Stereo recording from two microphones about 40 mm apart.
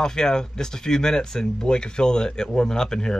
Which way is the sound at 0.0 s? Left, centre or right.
Centre.